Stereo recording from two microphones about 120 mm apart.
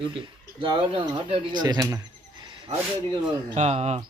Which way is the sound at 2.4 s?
40° right (ahead or behind).